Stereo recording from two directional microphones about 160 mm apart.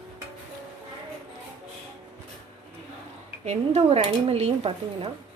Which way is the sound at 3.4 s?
40° right (ahead or behind).